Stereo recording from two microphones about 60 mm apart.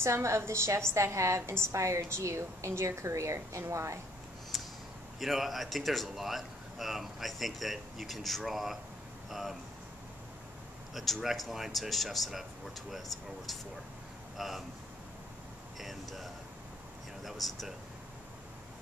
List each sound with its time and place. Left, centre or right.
0.0 s a woman's voice: right
4.5 s a sound: centre
5.2 s speech: centre
11.0 s speech: centre
14.3 s speech: centre
15.8 s speech: centre